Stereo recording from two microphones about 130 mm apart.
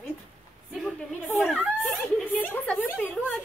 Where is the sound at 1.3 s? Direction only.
Centre (ahead or behind).